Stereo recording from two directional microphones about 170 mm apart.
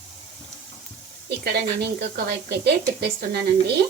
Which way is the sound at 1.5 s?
70° right (ahead or behind).